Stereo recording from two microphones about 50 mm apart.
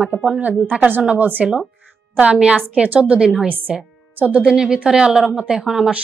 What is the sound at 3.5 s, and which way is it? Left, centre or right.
Speech, right.